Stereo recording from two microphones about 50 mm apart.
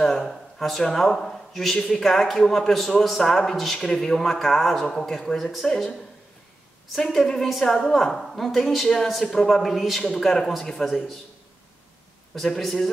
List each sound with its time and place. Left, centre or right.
0.0 s a man's voice: centre
7.0 s a man's voice: centre
12.4 s a man's voice: centre